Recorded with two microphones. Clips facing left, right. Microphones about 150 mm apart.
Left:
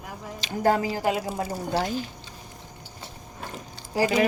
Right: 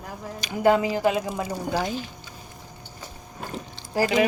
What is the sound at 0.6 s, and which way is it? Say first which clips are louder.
Speech: right 3 dB; 40° left (ahead or behind).